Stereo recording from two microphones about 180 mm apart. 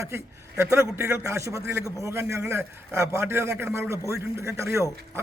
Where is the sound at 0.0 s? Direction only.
15° right (ahead or behind).